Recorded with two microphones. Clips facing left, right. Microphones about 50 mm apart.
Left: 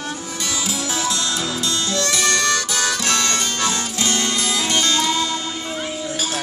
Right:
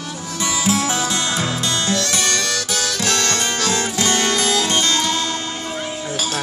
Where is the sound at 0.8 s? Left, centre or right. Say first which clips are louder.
Right 2 dB; right.